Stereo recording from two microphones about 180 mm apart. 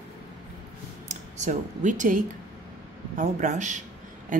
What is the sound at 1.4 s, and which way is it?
Speech, 40° right (ahead or behind).